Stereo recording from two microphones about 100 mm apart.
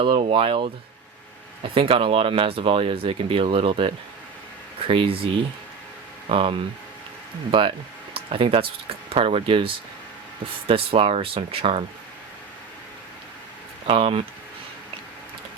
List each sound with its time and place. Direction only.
0.0 s speech: 60° right (ahead or behind)
6.2 s speech: 70° right (ahead or behind)
8.1 s a sound: 70° right (ahead or behind)
9.0 s speech: 70° right (ahead or behind)
13.8 s speech: 70° right (ahead or behind)